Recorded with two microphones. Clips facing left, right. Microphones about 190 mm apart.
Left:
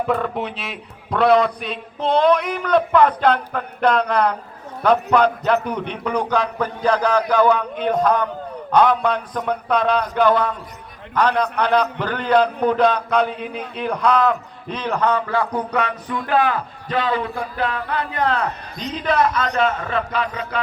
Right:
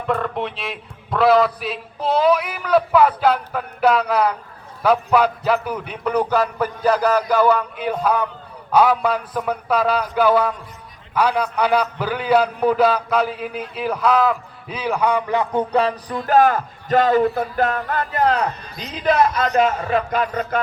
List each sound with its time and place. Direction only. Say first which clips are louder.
0.1 s a man's voice: left 1 dB; centre (ahead or behind); by 15.4 s 15° right (ahead or behind)
15.7 s speech: right 3 dB; 35° right (ahead or behind)
20.1 s speech: right 3 dB; 50° right (ahead or behind)